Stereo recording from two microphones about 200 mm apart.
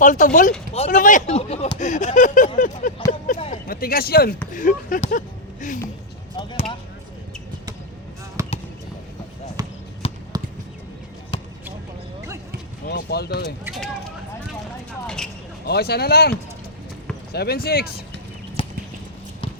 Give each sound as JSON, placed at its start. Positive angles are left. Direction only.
{"t": 0.0, "sound": "speech", "side_deg": 40}
{"t": 2.6, "sound": "a sound", "side_deg": 40}
{"t": 4.5, "sound": "speech", "side_deg": 40}
{"t": 6.3, "sound": "speech", "side_deg": 25}
{"t": 8.4, "sound": "basketball bounce", "side_deg": -15}
{"t": 9.6, "sound": "basketball bounce", "side_deg": -20}
{"t": 10.0, "sound": "basketball bounce", "side_deg": 30}
{"t": 11.3, "sound": "basketball bounce", "side_deg": 30}
{"t": 12.8, "sound": "speech", "side_deg": 55}
{"t": 13.7, "sound": "speech", "side_deg": 0}
{"t": 15.0, "sound": "vehicle", "side_deg": 5}
{"t": 15.6, "sound": "speech", "side_deg": 50}
{"t": 17.3, "sound": "speech", "side_deg": 50}
{"t": 18.6, "sound": "clip-clop", "side_deg": 25}